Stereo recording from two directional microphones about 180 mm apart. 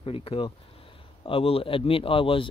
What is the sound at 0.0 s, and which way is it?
Speech, 30° left (ahead or behind).